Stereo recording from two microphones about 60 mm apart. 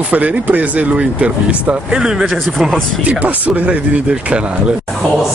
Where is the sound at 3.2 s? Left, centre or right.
Right.